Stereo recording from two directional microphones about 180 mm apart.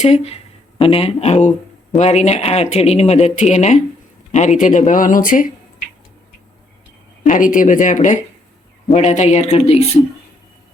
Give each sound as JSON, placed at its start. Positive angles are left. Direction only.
{"t": 0.0, "sound": "speech", "side_deg": 40}
{"t": 7.3, "sound": "speech", "side_deg": 45}